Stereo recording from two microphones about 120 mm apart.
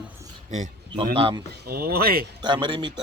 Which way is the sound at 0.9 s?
50° right (ahead or behind).